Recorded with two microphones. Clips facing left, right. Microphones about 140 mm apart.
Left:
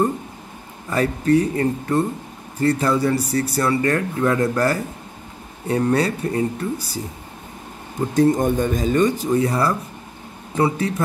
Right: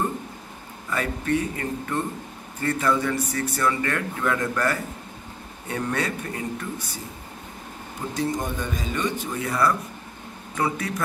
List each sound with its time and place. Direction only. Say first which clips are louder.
0.8 s speech: left 7 dB; 35° left (ahead or behind)
8.1 s speech: left 10 dB; 50° left (ahead or behind); by 10.9 s 30° left (ahead or behind)